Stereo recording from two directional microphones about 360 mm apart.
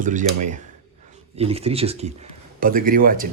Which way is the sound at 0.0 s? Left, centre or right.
Right.